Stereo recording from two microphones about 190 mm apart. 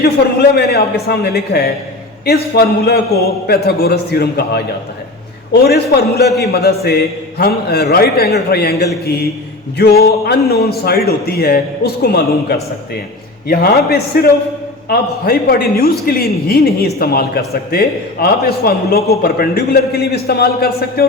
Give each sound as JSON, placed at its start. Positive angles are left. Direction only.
{"t": 0.5, "sound": "a man's voice", "side_deg": 55}
{"t": 5.6, "sound": "a man's voice", "side_deg": 55}